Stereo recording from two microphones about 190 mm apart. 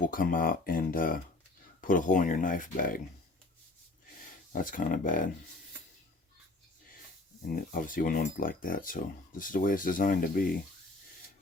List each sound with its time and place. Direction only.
0.0 s speech: 45° left (ahead or behind)
4.5 s speech: 45° left (ahead or behind)
7.4 s speech: 45° left (ahead or behind)